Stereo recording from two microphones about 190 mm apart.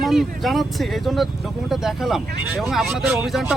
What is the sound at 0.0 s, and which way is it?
Speech, centre (ahead or behind).